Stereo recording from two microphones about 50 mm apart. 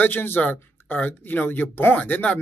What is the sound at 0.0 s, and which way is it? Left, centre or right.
Speech, left.